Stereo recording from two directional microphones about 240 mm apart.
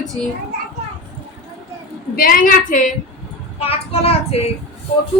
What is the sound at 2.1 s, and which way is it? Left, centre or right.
A woman's voice, left.